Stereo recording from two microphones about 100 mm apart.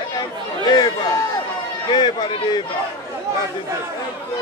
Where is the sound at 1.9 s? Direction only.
50° left (ahead or behind).